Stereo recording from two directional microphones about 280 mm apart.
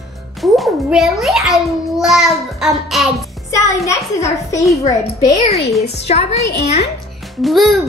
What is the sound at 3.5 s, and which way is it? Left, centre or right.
A child's voice, centre.